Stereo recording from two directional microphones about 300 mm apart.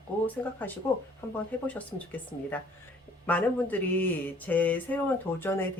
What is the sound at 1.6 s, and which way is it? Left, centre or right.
Speech, centre.